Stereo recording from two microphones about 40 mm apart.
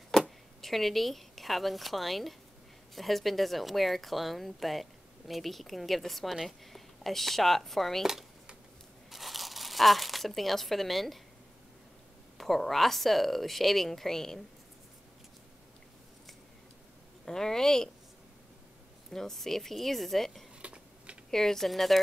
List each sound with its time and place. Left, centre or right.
0.6 s a woman's voice: centre
9.1 s speech: centre
12.4 s a woman's voice: centre
17.2 s speech: centre
19.1 s a woman's voice: centre
20.6 s typing: right
21.3 s speech: centre